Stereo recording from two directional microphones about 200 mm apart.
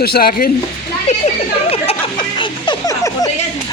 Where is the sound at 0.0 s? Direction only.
50° left (ahead or behind).